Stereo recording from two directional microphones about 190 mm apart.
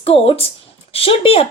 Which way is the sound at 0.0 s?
30° left (ahead or behind).